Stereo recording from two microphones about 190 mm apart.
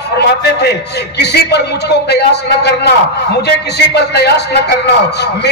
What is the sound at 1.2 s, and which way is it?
Speech, 60° left (ahead or behind).